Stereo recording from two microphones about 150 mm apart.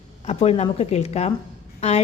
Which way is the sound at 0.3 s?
45° left (ahead or behind).